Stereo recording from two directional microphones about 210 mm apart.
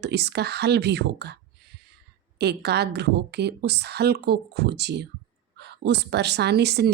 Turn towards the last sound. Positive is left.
turn(degrees=-50)  # may be behind; listen again after turning